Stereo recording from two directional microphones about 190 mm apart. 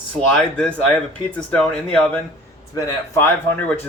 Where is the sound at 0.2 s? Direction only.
5° left (ahead or behind).